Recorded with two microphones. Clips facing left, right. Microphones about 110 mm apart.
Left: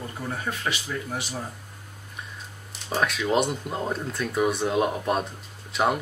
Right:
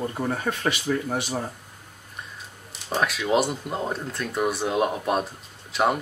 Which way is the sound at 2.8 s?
Centre (ahead or behind).